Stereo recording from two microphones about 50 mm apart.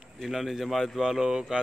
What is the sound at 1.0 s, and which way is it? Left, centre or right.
Speech, centre.